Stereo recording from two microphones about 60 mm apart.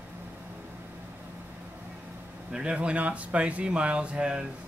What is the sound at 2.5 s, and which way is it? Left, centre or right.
Speech, centre.